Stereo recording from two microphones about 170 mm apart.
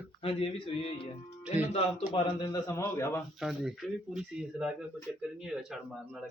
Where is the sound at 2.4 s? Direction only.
15° left (ahead or behind).